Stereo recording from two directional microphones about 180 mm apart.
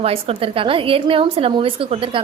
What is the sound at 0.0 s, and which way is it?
A woman's voice, 35° right (ahead or behind).